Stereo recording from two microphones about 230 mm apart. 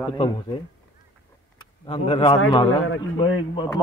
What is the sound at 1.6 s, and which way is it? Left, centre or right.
Speech, left.